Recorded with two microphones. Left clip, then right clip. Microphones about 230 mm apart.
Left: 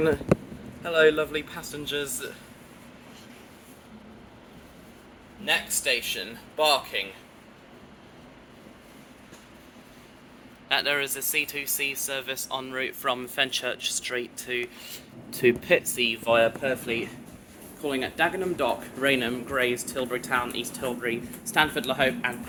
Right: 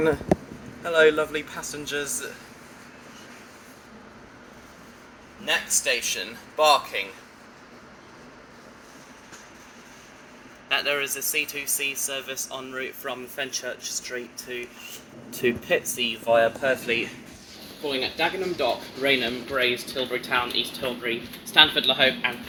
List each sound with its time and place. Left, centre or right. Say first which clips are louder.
0.9 s speech: right 2 dB; centre
5.5 s speech: right 1 dB; centre
10.7 s speech: even; left
16.4 s speech: right 2 dB; centre